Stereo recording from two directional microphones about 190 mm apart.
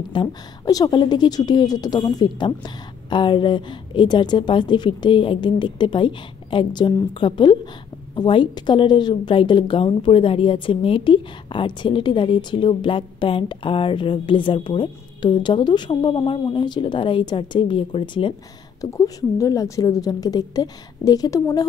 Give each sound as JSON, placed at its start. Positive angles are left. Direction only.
{"t": 0.1, "sound": "a woman's voice", "side_deg": 20}